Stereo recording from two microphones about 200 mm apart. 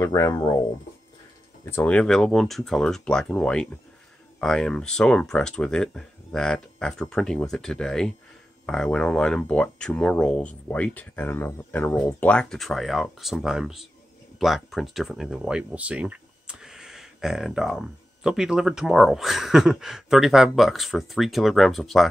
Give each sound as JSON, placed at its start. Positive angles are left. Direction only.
{"t": 0.0, "sound": "speech", "side_deg": 15}
{"t": 1.6, "sound": "speech", "side_deg": 10}